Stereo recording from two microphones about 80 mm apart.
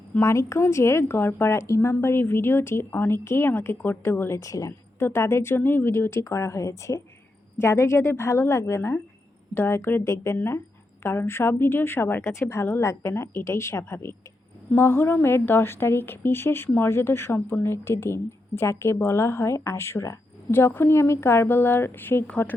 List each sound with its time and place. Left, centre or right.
0.2 s a woman's voice: left
4.4 s a woman's voice: left
4.9 s a woman's voice: left